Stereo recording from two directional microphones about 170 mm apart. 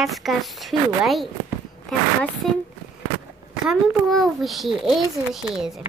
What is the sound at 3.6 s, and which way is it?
A child's voice, centre (ahead or behind).